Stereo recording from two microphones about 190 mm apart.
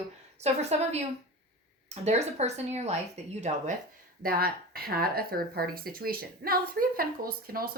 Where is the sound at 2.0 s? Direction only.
35° right (ahead or behind).